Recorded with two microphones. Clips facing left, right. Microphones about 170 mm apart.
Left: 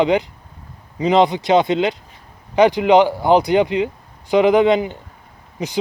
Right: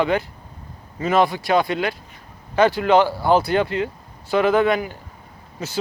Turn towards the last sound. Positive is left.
turn(degrees=15)  # may be behind; listen again after turning